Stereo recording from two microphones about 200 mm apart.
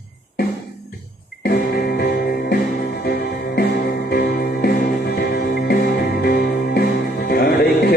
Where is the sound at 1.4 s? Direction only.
50° left (ahead or behind).